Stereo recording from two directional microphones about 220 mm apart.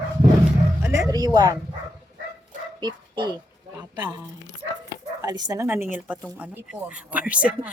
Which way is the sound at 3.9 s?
20° right (ahead or behind).